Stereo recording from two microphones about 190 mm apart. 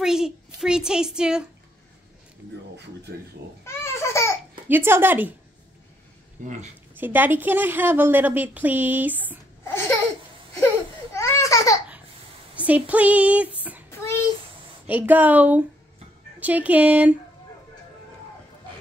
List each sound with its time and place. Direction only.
0.0 s a sound: 5° right (ahead or behind)
0.6 s a woman's voice: 5° right (ahead or behind)
3.1 s speech: 60° right (ahead or behind)
3.6 s babbling: 15° left (ahead or behind)
4.6 s a woman's voice: 10° right (ahead or behind)
6.4 s speech: 40° right (ahead or behind)
7.0 s a woman's voice: 10° right (ahead or behind)
11.1 s a sound: 15° left (ahead or behind)
12.5 s speech: 5° right (ahead or behind)
13.8 s a sound: 15° left (ahead or behind)
14.9 s a woman's voice: 10° right (ahead or behind)